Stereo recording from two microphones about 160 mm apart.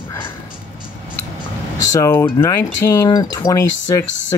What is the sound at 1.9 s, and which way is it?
Speech, 15° left (ahead or behind).